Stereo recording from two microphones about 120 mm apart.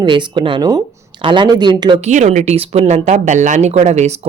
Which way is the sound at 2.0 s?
75° right (ahead or behind).